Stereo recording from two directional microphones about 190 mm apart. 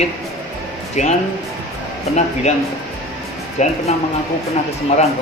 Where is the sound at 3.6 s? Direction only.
40° left (ahead or behind).